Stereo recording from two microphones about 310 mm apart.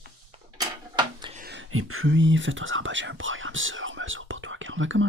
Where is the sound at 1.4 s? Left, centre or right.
Right.